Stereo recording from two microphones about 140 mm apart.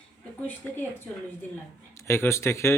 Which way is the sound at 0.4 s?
15° left (ahead or behind).